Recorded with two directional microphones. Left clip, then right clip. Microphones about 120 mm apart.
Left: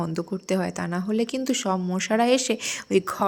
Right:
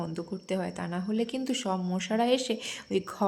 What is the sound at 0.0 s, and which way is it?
Speech, 25° left (ahead or behind).